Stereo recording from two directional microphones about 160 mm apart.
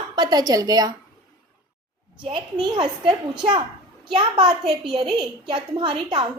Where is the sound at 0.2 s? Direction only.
25° right (ahead or behind).